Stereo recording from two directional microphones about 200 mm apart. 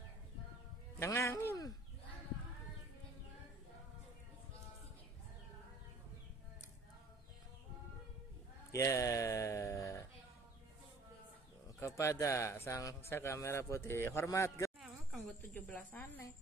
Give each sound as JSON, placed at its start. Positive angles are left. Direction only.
{"t": 0.9, "sound": "music", "side_deg": 15}
{"t": 8.7, "sound": "a sound", "side_deg": 15}
{"t": 11.8, "sound": "speech", "side_deg": 15}
{"t": 14.8, "sound": "insect", "side_deg": 0}
{"t": 15.4, "sound": "speech", "side_deg": 10}